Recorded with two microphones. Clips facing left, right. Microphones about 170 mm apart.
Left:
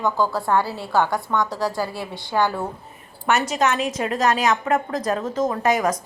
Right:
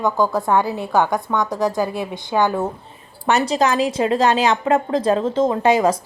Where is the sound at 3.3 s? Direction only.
35° right (ahead or behind).